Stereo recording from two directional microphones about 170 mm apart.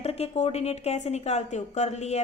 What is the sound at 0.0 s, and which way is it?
A woman's voice, 35° left (ahead or behind).